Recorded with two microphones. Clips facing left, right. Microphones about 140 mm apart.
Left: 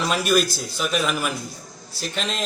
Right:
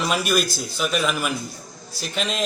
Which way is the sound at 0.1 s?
5° right (ahead or behind).